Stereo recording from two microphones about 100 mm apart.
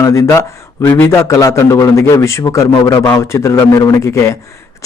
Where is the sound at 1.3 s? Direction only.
30° left (ahead or behind).